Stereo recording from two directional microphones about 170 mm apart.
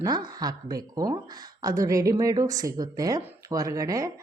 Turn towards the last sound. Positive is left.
turn(degrees=-20)  # may be behind; listen again after turning